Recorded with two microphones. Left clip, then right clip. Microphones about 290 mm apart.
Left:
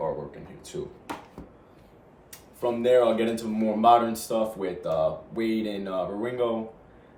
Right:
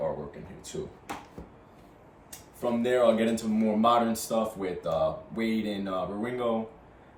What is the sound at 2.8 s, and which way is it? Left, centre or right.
Speech, centre.